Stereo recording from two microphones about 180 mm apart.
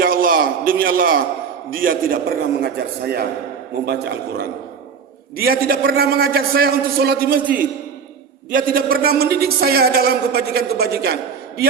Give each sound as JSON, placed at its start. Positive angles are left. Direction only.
{"t": 0.0, "sound": "a sound", "side_deg": -50}
{"t": 1.7, "sound": "a man's voice", "side_deg": -50}
{"t": 2.6, "sound": "a man's voice", "side_deg": -60}
{"t": 8.4, "sound": "a man's voice", "side_deg": -50}